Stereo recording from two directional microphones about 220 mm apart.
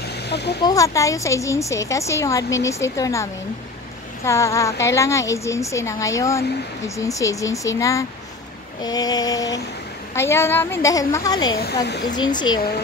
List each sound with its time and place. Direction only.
0.0 s snake: 50° left (ahead or behind)
0.6 s a woman's voice: 15° left (ahead or behind)
11.5 s speech: 45° left (ahead or behind)
12.2 s speech: 20° left (ahead or behind)